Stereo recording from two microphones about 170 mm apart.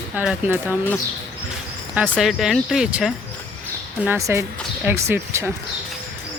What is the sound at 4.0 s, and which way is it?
Speech, 15° right (ahead or behind).